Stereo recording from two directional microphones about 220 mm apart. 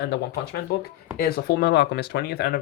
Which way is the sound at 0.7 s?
45° left (ahead or behind).